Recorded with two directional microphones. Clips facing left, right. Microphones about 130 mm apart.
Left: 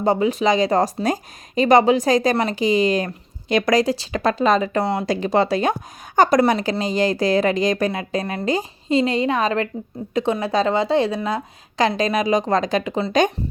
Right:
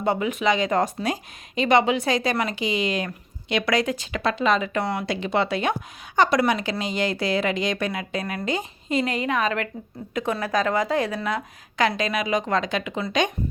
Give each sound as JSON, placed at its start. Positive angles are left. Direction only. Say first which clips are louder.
{"t": 0.0, "sound": "speech", "louder": "left 5 dB", "side_deg": 35}